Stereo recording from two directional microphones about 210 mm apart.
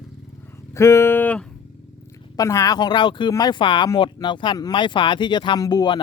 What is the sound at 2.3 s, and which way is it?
Speech, 15° left (ahead or behind).